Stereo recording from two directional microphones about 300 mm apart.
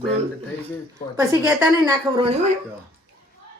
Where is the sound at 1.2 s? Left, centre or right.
Centre.